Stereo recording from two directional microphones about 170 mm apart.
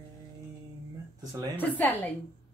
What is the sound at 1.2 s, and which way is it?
Speech, 20° right (ahead or behind).